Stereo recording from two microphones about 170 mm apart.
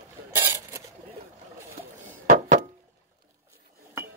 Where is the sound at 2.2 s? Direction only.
50° right (ahead or behind).